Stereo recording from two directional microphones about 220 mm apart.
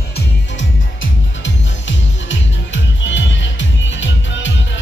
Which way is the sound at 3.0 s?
55° left (ahead or behind).